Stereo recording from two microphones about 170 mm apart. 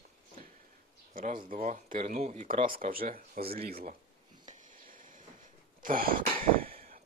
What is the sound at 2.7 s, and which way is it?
Speech, 55° right (ahead or behind).